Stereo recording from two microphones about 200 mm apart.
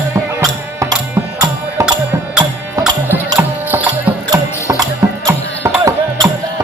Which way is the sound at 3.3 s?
5° right (ahead or behind).